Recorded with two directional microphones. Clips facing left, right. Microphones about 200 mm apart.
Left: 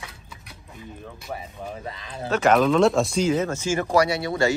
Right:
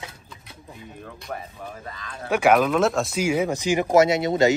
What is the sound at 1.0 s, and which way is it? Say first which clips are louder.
Speech: right 1 dB; 5° left (ahead or behind).